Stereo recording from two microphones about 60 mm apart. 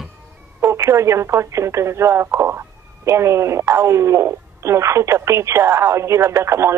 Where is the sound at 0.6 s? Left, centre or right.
Right.